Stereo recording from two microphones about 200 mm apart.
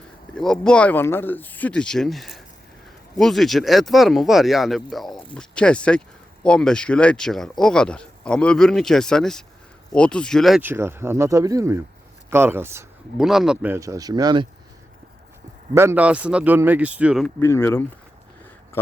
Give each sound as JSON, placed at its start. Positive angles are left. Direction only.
{"t": 0.3, "sound": "speech", "side_deg": 0}
{"t": 15.7, "sound": "speech", "side_deg": -15}
{"t": 17.2, "sound": "speech", "side_deg": 10}